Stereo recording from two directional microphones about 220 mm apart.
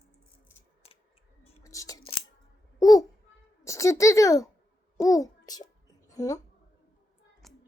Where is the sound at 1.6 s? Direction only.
15° left (ahead or behind).